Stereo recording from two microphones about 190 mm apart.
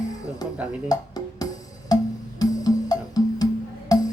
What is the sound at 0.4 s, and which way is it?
Music, 20° left (ahead or behind).